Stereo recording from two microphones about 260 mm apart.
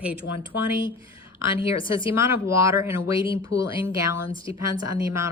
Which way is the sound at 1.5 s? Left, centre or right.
Centre.